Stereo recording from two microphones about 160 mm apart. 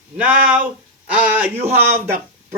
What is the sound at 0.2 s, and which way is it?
Speech, 10° right (ahead or behind).